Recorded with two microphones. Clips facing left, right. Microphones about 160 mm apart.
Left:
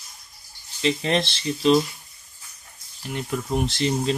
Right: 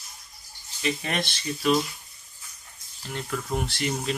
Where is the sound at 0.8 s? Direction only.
30° left (ahead or behind).